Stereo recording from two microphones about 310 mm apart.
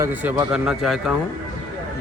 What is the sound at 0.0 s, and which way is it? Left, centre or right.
Speech, centre.